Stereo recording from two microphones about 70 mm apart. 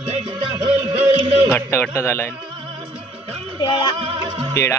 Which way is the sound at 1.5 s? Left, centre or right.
Left.